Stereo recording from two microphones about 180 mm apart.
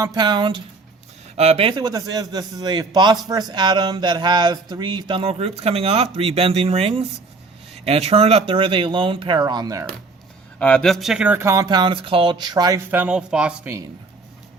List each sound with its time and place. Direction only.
0.0 s a man's voice: 20° right (ahead or behind)
10.6 s a man's voice: 5° left (ahead or behind); by 12.8 s 20° right (ahead or behind)
12.9 s speech: 10° right (ahead or behind)